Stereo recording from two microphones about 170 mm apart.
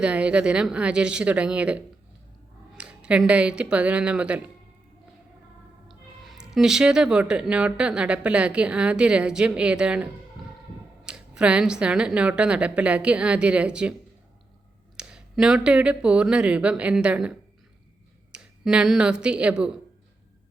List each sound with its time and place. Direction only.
0.0 s speech: 5° right (ahead or behind)
5.9 s speech: centre (ahead or behind)
14.9 s a woman's voice: 5° right (ahead or behind)